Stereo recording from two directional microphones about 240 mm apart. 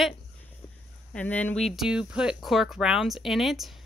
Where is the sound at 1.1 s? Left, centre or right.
Centre.